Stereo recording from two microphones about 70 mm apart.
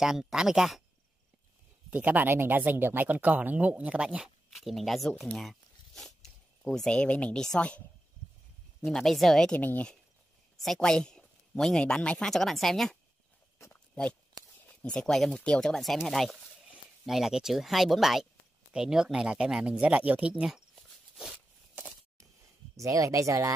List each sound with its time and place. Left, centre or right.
0.0 s speech: centre
1.9 s speech: right
4.5 s speech: centre
8.8 s speech: centre
9.5 s speech: left
10.6 s speech: centre
13.7 s oink: centre
14.9 s speech: centre
22.8 s speech: right